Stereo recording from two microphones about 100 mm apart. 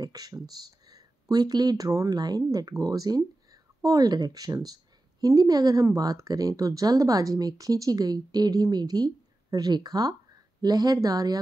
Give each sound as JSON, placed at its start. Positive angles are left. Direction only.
{"t": 0.0, "sound": "speech", "side_deg": -40}